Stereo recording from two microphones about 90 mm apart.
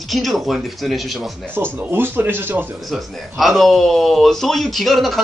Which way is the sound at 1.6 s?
20° right (ahead or behind).